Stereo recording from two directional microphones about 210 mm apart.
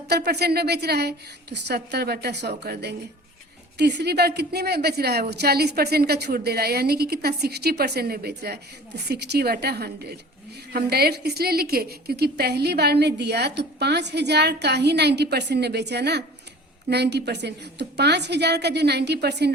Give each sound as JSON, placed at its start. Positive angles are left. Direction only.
{"t": 0.1, "sound": "a woman's voice", "side_deg": -50}